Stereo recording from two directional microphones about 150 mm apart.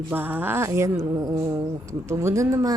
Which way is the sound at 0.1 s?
10° right (ahead or behind).